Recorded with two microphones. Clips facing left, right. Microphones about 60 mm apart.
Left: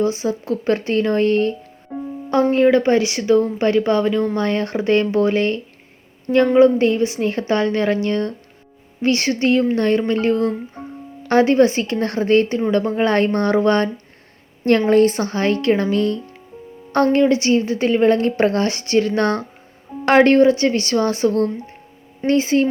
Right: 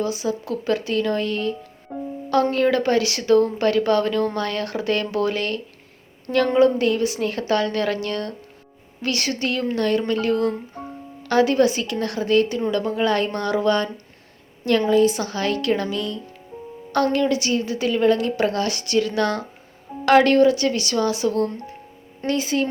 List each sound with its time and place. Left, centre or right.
0.0 s a woman's voice: left
2.3 s speech: left
4.4 s a woman's voice: left